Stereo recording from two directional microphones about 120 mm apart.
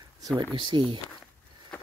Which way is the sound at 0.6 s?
40° right (ahead or behind).